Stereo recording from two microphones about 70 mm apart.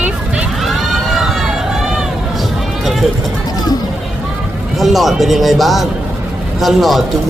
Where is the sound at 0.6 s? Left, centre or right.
Centre.